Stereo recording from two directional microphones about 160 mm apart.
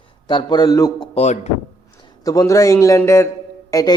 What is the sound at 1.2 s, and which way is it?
Speech, 45° left (ahead or behind).